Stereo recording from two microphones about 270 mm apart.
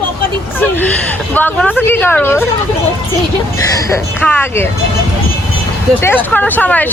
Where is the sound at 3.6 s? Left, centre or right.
Centre.